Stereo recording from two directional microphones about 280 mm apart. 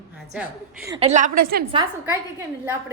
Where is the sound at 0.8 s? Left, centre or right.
Centre.